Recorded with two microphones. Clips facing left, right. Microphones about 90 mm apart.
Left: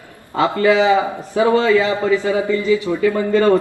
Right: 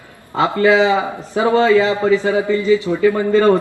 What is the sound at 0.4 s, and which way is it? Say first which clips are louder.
A man's voice: right 1 dB; 25° right (ahead or behind).